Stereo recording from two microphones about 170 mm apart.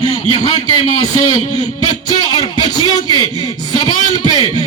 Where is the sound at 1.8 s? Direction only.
25° left (ahead or behind).